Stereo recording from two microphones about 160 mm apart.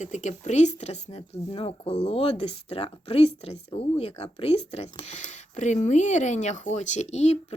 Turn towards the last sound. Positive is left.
turn(degrees=45)  # may be behind; listen again after turning